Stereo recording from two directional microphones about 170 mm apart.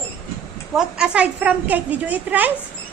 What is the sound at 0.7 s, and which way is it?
A woman's voice, 5° right (ahead or behind).